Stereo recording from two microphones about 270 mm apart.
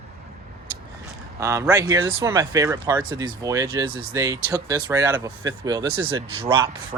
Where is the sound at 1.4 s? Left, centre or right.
Centre.